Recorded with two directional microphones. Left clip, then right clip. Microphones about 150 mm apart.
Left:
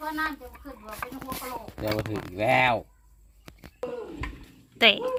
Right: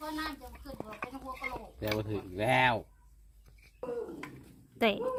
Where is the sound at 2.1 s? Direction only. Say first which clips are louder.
Left 6 dB; 35° left (ahead or behind).